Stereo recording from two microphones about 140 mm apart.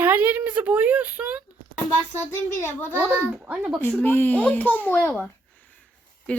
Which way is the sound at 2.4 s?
15° left (ahead or behind).